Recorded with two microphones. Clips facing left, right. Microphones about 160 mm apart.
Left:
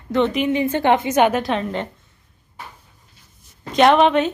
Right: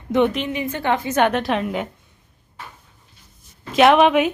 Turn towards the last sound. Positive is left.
turn(degrees=-5)  # may be behind; listen again after turning